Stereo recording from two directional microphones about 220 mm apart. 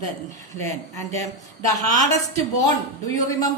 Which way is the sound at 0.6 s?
15° left (ahead or behind).